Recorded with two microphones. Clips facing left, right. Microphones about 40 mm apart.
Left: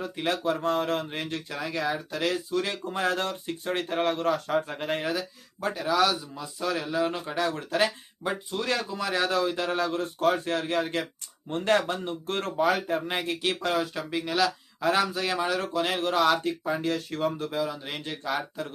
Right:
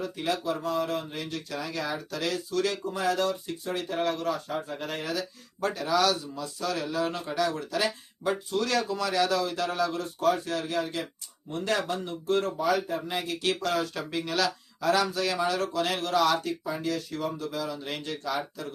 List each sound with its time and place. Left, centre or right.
0.3 s speech: left
5.1 s speech: centre
7.3 s speech: left
8.2 s speech: centre; by 13.3 s left
13.6 s speech: left
14.8 s speech: left
16.6 s speech: left
17.6 s speech: centre